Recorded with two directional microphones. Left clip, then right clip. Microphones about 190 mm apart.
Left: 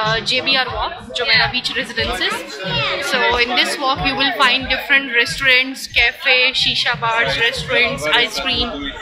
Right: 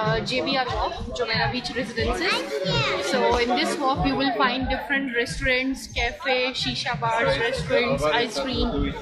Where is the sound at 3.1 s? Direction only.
10° right (ahead or behind).